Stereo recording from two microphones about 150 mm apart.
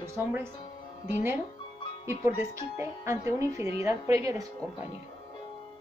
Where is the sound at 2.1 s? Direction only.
15° right (ahead or behind).